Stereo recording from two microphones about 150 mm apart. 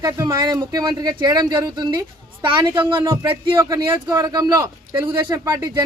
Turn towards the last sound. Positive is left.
turn(degrees=-20)  # may be behind; listen again after turning